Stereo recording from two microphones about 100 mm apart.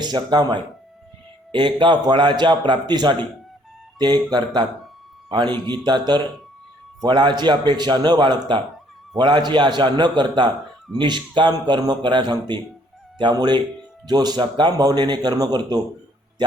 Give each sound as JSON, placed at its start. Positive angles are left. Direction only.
{"t": 0.0, "sound": "a man's voice", "side_deg": -45}